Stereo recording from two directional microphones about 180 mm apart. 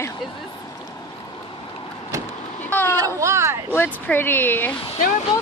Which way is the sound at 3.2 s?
15° right (ahead or behind).